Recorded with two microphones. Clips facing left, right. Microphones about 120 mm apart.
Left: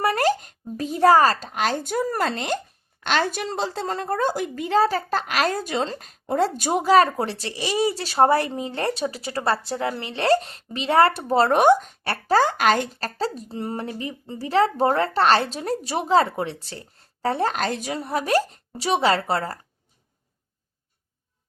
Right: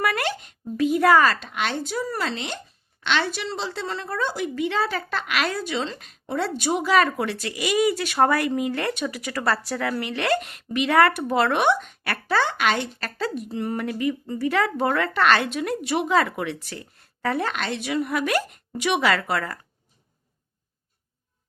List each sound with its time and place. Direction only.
0.0 s speech: 35° left (ahead or behind)